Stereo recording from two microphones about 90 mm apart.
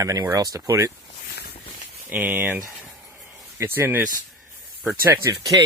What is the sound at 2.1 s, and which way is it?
Speech, 20° right (ahead or behind).